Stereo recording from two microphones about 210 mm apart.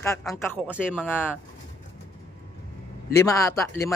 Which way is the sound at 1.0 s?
10° left (ahead or behind).